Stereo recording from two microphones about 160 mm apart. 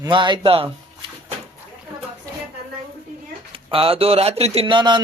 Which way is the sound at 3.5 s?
35° right (ahead or behind).